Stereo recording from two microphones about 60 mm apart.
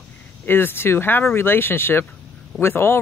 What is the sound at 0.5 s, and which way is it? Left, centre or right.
Speech, left.